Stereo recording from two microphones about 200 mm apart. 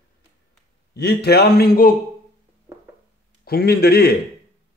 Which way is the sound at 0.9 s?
55° left (ahead or behind).